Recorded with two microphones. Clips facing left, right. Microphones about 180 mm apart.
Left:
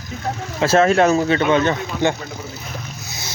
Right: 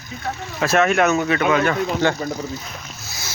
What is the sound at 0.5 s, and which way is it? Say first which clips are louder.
Speech: left 3 dB; 25° left (ahead or behind).